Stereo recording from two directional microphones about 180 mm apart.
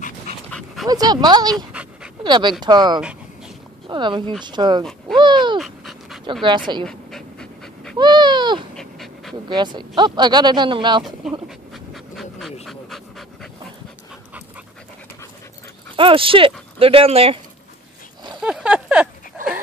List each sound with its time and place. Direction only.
0.5 s dog: 5° left (ahead or behind)
0.8 s speech: 20° right (ahead or behind)
3.0 s dog: 5° right (ahead or behind)
3.9 s speech: 25° right (ahead or behind)
5.1 s a sound: 25° right (ahead or behind)
5.6 s dog: centre (ahead or behind)
8.0 s a sound: 25° right (ahead or behind)
8.7 s dog: centre (ahead or behind)
9.5 s speech: 25° right (ahead or behind)
11.4 s dog: centre (ahead or behind)
16.0 s speech: 30° right (ahead or behind)
18.4 s a sound: 5° right (ahead or behind)